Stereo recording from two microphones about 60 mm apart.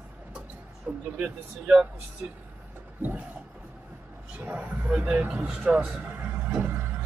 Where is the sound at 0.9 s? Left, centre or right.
Right.